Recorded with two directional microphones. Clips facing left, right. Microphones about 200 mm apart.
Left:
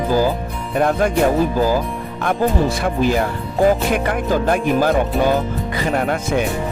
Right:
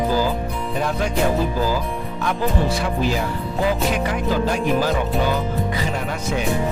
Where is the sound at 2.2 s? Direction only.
50° left (ahead or behind).